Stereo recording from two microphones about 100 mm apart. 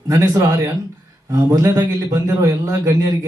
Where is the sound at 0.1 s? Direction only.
35° right (ahead or behind).